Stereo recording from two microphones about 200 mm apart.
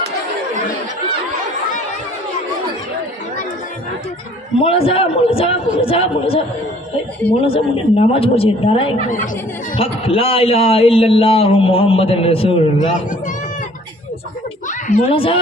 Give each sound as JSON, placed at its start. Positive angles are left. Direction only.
{"t": 4.6, "sound": "a man's voice", "side_deg": 30}
{"t": 7.4, "sound": "a man's voice", "side_deg": 30}
{"t": 9.0, "sound": "speech", "side_deg": 40}
{"t": 9.7, "sound": "a man's voice", "side_deg": 30}
{"t": 12.8, "sound": "speech", "side_deg": 40}
{"t": 15.1, "sound": "a man's voice", "side_deg": 25}